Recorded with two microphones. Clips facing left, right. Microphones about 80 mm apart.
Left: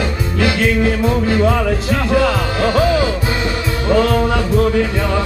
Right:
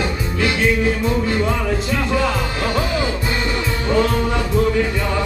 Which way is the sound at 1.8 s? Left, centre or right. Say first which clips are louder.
Left 5 dB; left.